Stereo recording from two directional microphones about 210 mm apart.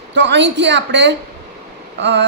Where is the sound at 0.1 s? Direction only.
60° right (ahead or behind).